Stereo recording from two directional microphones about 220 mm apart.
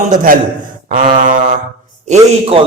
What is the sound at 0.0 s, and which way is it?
Speech, 35° right (ahead or behind).